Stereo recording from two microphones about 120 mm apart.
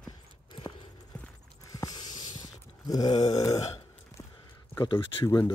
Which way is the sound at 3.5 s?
60° left (ahead or behind).